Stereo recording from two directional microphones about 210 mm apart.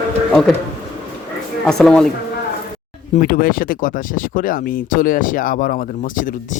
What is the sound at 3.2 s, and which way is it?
Speech, 45° left (ahead or behind).